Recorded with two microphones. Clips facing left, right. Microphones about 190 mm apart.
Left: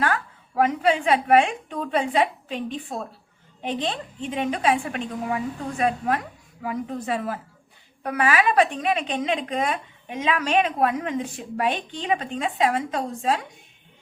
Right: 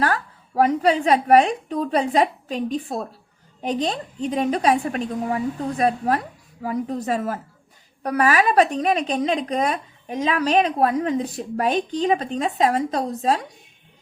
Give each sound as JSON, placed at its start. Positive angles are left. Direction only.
{"t": 0.0, "sound": "a woman's voice", "side_deg": -35}